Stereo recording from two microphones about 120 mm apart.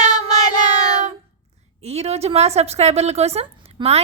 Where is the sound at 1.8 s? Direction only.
60° right (ahead or behind).